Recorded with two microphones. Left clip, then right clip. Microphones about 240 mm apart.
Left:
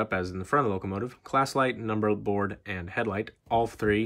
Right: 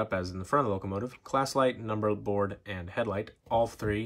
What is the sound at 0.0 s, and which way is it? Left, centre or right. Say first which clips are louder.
Speech: left 3 dB; centre.